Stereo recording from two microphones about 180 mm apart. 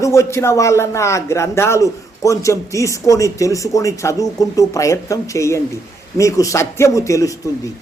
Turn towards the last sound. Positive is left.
turn(degrees=20)  # may be behind; listen again after turning